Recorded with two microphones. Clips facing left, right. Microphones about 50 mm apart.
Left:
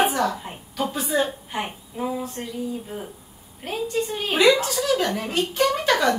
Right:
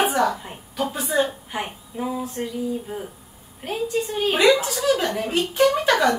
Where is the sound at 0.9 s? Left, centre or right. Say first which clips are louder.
Right 1 dB; centre.